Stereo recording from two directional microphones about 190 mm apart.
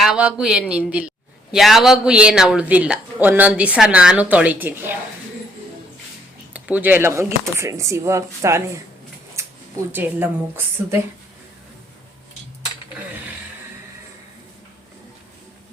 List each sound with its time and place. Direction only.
0.0 s a woman's voice: 5° right (ahead or behind)
6.5 s speech: 10° right (ahead or behind)
9.4 s a sound: 15° right (ahead or behind)
9.9 s speech: 10° right (ahead or behind)